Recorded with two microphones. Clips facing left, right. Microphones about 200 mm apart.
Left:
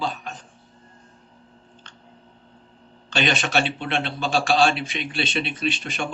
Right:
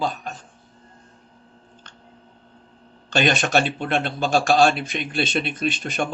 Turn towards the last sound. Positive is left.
turn(degrees=-45)  # may be behind; listen again after turning